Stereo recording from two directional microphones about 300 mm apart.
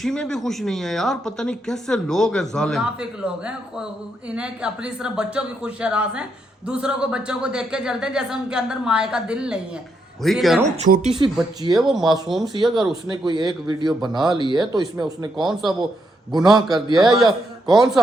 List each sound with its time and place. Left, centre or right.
0.0 s speech: centre
10.8 s speech: right
12.6 s speech: centre
12.9 s a man's voice: centre